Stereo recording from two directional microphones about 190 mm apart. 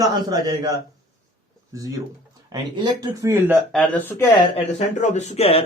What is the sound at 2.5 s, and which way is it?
Speech, 20° right (ahead or behind).